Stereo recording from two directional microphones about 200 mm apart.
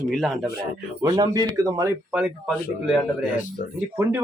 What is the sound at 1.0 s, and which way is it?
Speech, 15° right (ahead or behind).